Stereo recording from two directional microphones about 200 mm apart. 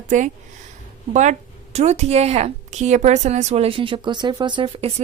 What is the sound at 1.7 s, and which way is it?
A woman's voice, 35° right (ahead or behind).